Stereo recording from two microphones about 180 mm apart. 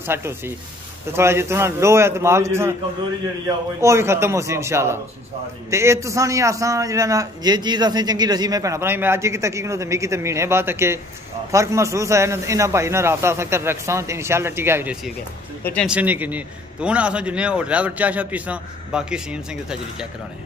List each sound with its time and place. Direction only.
0.0 s a man's voice: 15° right (ahead or behind)